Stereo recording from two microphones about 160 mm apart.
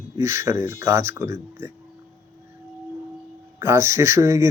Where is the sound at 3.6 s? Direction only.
15° right (ahead or behind).